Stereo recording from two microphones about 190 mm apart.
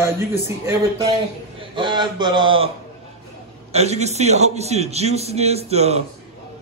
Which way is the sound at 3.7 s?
35° right (ahead or behind).